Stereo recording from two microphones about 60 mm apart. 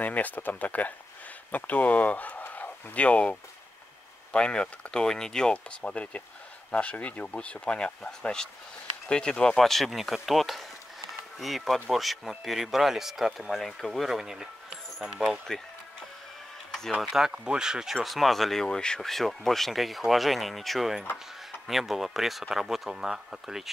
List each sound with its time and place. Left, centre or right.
0.0 s speech: left
9.6 s speech: centre
17.0 s speech: centre
17.5 s speech: centre